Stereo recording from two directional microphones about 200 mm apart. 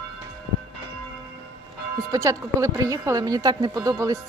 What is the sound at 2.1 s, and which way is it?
Speech, 15° right (ahead or behind).